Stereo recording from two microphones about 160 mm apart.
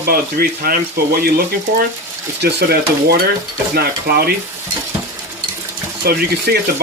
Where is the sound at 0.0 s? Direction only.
70° right (ahead or behind).